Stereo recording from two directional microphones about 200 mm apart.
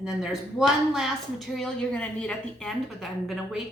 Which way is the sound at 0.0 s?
5° right (ahead or behind).